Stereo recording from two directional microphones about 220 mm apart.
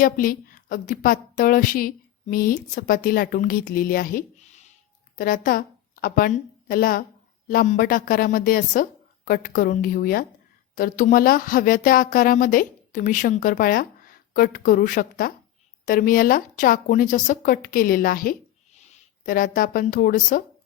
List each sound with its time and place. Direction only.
0.0 s a woman's voice: 40° left (ahead or behind)